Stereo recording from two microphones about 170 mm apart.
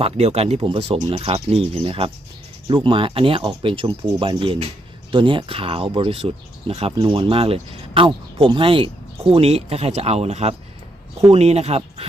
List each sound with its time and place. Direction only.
0.0 s speech: 40° right (ahead or behind)